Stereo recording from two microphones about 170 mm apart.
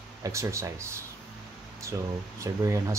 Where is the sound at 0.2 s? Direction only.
15° right (ahead or behind).